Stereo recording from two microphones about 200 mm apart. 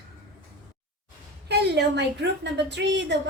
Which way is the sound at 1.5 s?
55° right (ahead or behind).